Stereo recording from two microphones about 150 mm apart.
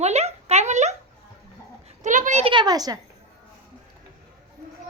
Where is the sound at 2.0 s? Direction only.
55° right (ahead or behind).